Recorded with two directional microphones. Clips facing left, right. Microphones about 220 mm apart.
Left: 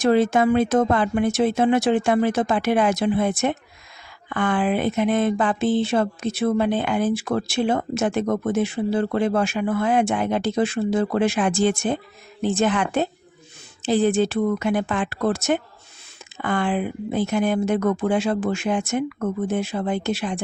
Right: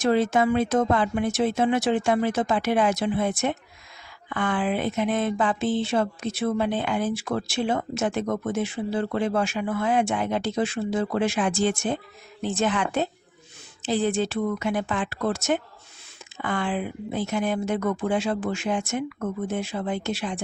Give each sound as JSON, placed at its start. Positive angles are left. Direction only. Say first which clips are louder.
{"t": 0.0, "sound": "speech", "louder": "left 3 dB", "side_deg": 65}